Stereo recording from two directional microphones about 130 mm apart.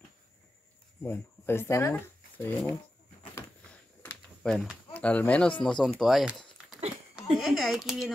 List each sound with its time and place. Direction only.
1.0 s speech: 20° left (ahead or behind)
3.7 s a sound: 15° left (ahead or behind)
4.9 s speech: 10° left (ahead or behind)